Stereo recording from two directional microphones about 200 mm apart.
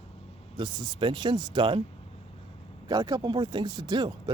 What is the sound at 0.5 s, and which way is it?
Speech, 20° right (ahead or behind).